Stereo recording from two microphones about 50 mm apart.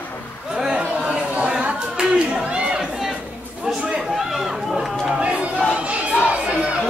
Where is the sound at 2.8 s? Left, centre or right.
Centre.